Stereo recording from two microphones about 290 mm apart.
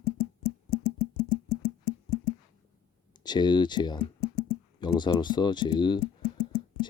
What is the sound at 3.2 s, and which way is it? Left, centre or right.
Speech, centre.